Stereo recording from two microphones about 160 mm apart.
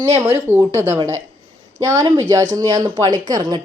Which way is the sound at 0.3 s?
15° right (ahead or behind).